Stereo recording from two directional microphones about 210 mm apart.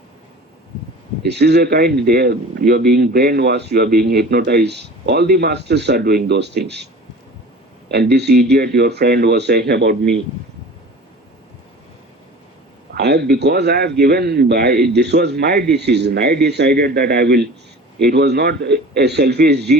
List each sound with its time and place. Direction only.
1.2 s speech: 55° right (ahead or behind)
7.9 s speech: 50° right (ahead or behind)
12.9 s speech: 50° right (ahead or behind)